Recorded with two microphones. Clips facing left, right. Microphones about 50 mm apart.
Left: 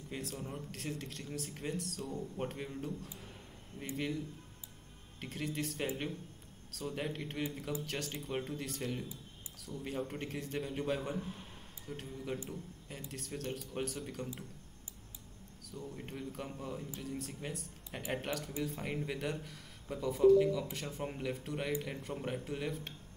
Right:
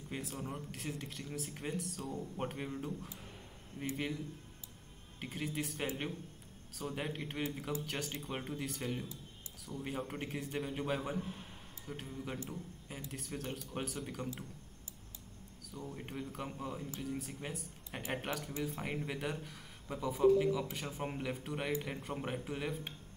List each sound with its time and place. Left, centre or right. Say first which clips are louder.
0.1 s speech: even; centre
5.2 s speech: left 1 dB; centre
7.0 s a man's voice: left 1 dB; centre
15.9 s a man's voice: right 1 dB; centre